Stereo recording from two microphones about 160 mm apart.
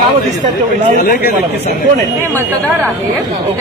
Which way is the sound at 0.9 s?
70° left (ahead or behind).